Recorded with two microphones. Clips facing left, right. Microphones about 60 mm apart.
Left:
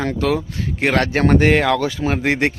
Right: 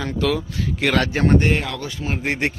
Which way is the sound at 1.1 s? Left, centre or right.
Left.